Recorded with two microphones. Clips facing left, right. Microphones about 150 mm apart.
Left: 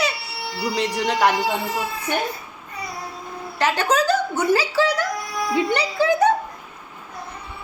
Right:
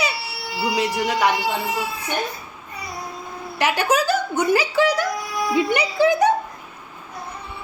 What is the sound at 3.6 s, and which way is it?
A woman's voice, 10° right (ahead or behind).